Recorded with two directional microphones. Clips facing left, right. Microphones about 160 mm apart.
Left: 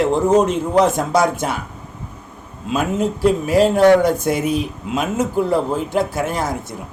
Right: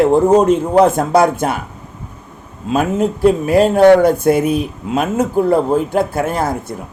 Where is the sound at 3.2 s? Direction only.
55° right (ahead or behind).